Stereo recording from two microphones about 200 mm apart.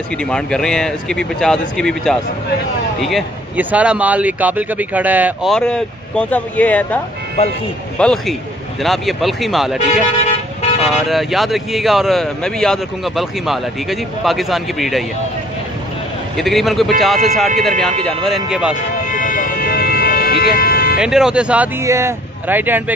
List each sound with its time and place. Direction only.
0.2 s speech: 5° left (ahead or behind)
7.4 s speech: 30° left (ahead or behind)
8.0 s speech: 5° left (ahead or behind)
16.3 s speech: centre (ahead or behind)
19.0 s vehicle: 40° left (ahead or behind)
21.0 s speech: 5° right (ahead or behind)